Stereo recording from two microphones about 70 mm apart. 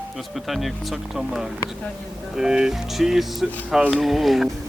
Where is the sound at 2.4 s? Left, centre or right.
Centre.